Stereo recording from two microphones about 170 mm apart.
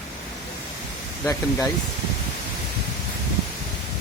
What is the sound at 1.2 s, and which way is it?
Speech, 20° left (ahead or behind).